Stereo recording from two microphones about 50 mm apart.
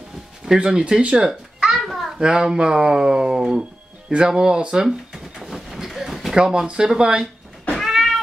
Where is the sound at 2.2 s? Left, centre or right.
Centre.